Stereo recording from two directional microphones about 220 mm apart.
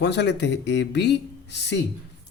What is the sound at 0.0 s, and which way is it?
Speech, 50° left (ahead or behind).